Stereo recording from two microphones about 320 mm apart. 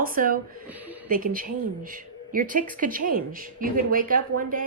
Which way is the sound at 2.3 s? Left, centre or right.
Right.